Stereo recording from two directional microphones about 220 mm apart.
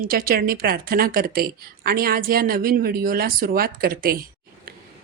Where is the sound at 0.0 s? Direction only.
40° right (ahead or behind).